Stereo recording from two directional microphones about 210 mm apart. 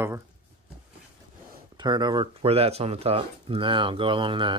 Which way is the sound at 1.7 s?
20° right (ahead or behind).